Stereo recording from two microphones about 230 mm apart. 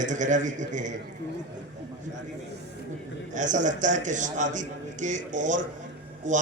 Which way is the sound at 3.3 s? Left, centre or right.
Right.